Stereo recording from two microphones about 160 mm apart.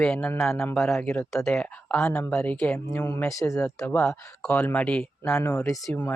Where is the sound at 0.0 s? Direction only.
5° left (ahead or behind).